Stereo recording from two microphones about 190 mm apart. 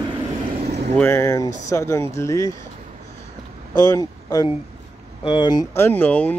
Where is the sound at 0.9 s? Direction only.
10° left (ahead or behind).